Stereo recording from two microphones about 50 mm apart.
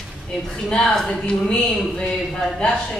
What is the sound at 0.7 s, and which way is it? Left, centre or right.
Speech, centre.